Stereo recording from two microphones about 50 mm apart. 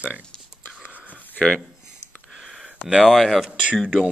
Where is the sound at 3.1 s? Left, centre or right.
Centre.